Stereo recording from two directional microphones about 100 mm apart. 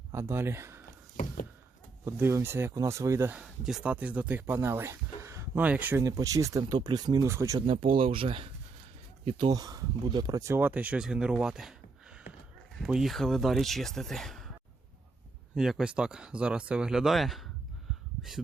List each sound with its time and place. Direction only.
0.1 s speech: 25° right (ahead or behind)
2.0 s speech: 25° right (ahead or behind)
3.4 s speech: 5° right (ahead or behind); by 5.6 s 30° right (ahead or behind)
5.6 s speech: 15° right (ahead or behind)
6.0 s speech: 35° right (ahead or behind)
6.7 s speech: 45° right (ahead or behind)
7.3 s speech: 30° right (ahead or behind)
7.7 s speech: 65° right (ahead or behind)
9.5 s speech: 35° right (ahead or behind)
10.4 s speech: 20° right (ahead or behind); by 11.7 s 5° right (ahead or behind)
12.8 s speech: 5° right (ahead or behind)
15.5 s speech: 5° right (ahead or behind)